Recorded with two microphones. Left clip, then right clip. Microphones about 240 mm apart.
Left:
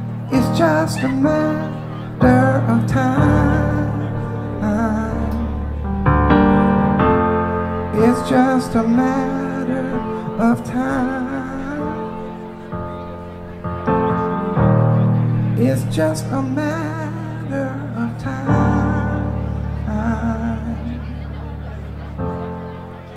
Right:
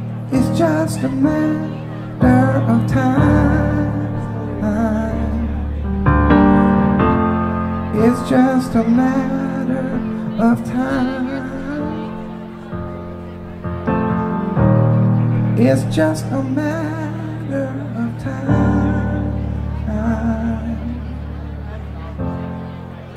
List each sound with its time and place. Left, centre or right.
0.3 s music: left
13.8 s music: centre
15.5 s speech: centre
16.0 s music: centre